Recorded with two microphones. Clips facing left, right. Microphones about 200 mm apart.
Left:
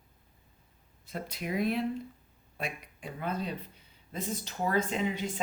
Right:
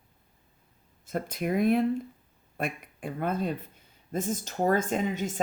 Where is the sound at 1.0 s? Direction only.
50° right (ahead or behind).